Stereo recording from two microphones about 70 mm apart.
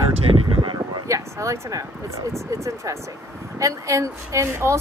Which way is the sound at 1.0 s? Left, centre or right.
Right.